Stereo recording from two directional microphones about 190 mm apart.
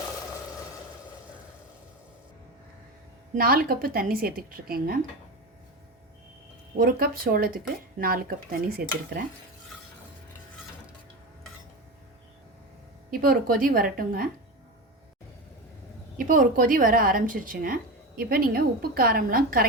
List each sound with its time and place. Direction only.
3.3 s a woman's voice: 50° right (ahead or behind)
6.7 s a woman's voice: 50° right (ahead or behind)
13.1 s a woman's voice: 50° right (ahead or behind)
16.1 s a woman's voice: 45° right (ahead or behind)